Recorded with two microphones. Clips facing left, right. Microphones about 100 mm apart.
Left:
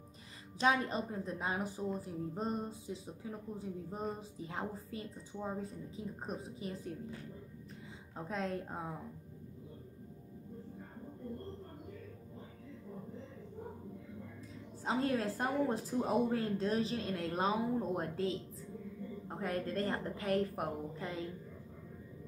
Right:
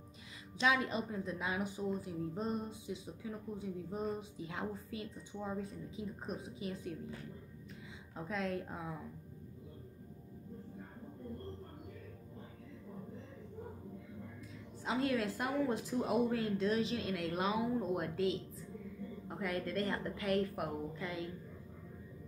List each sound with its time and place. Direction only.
0.6 s a woman's voice: 40° left (ahead or behind)
8.3 s a woman's voice: 35° left (ahead or behind)
14.9 s a woman's voice: 35° left (ahead or behind)